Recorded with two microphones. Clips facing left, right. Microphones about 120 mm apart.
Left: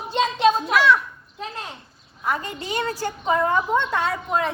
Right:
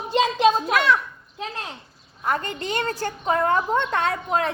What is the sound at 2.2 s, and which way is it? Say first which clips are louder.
A woman's voice: right 1 dB; 5° left (ahead or behind).